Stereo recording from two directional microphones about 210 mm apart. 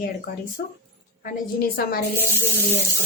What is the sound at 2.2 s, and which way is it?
Speech, 10° left (ahead or behind).